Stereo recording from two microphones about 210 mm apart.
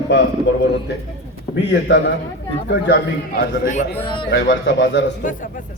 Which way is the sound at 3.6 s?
35° left (ahead or behind).